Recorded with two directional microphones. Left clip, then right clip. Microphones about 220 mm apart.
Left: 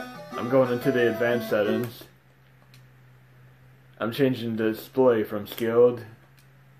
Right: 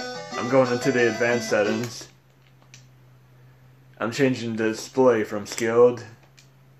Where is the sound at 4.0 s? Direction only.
5° right (ahead or behind).